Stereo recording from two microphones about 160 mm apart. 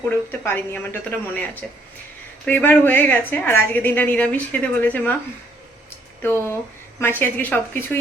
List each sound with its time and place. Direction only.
0.1 s a woman's voice: 15° left (ahead or behind)
6.2 s a woman's voice: 15° left (ahead or behind)